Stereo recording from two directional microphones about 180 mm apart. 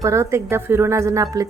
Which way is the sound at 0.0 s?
15° right (ahead or behind).